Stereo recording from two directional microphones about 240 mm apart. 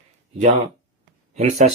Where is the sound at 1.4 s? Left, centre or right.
Right.